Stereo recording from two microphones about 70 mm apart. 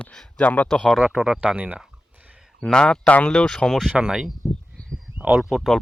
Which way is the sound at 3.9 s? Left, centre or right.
Centre.